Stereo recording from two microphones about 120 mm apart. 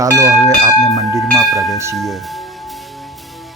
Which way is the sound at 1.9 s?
Centre (ahead or behind).